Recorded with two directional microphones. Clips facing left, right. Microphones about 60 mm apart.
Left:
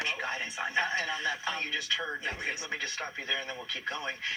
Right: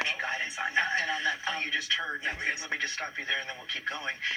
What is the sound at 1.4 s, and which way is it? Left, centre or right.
Speech, right.